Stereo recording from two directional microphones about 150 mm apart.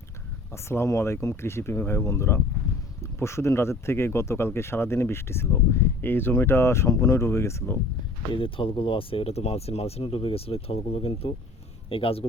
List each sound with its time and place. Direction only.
0.5 s speech: 15° left (ahead or behind)
8.3 s speech: 35° left (ahead or behind)